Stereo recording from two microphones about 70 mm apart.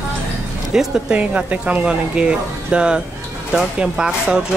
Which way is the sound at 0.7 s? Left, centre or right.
Centre.